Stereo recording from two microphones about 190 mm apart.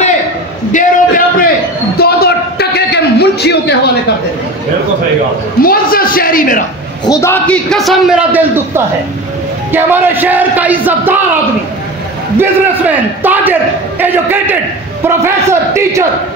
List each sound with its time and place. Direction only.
0.7 s a sound: 45° left (ahead or behind)
5.6 s a man's voice: 50° left (ahead or behind)
7.1 s a man's voice: 15° left (ahead or behind); by 11.1 s 10° right (ahead or behind)
12.4 s a man's voice: 10° right (ahead or behind)